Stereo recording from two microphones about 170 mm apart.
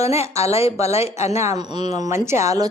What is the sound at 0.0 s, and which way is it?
A woman's voice, 40° left (ahead or behind).